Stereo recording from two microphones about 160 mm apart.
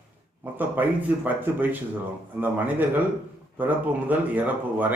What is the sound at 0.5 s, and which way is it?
Speech, 10° right (ahead or behind).